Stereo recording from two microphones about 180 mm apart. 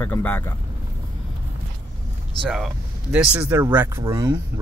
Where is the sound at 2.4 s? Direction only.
Centre (ahead or behind).